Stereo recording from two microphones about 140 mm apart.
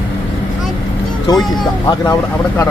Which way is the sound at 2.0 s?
20° left (ahead or behind).